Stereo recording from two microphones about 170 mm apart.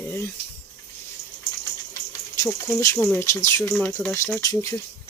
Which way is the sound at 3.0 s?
10° left (ahead or behind).